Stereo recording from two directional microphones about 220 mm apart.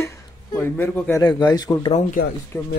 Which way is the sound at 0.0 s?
10° left (ahead or behind).